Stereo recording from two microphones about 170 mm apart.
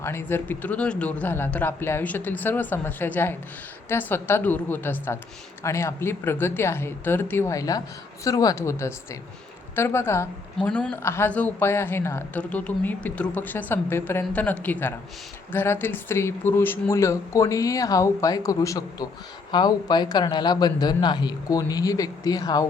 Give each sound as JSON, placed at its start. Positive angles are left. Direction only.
{"t": 0.0, "sound": "a woman's voice", "side_deg": 15}